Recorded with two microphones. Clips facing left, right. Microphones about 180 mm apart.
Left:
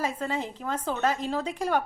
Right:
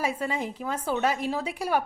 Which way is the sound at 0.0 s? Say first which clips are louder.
Right 1 dB; 10° right (ahead or behind).